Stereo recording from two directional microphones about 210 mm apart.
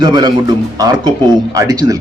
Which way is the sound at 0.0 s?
20° right (ahead or behind).